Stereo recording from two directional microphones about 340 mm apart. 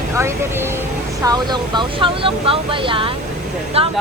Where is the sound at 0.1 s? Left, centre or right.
Centre.